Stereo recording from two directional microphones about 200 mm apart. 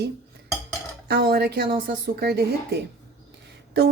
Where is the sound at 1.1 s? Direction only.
50° right (ahead or behind).